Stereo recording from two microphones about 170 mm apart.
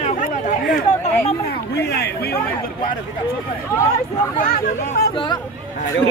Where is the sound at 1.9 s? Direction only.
70° left (ahead or behind).